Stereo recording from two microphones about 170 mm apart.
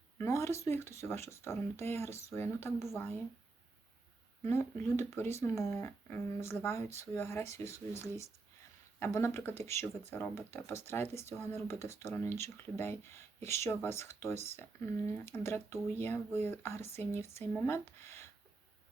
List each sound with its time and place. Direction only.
0.2 s speech: 15° left (ahead or behind)
4.4 s speech: 15° left (ahead or behind)
18.0 s a sound: 15° left (ahead or behind)